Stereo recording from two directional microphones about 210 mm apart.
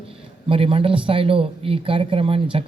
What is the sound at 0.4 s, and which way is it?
Speech, 25° right (ahead or behind).